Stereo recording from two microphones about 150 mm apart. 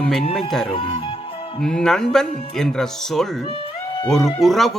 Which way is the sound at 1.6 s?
5° left (ahead or behind).